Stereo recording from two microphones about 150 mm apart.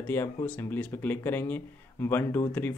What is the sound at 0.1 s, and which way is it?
Speech, 15° left (ahead or behind).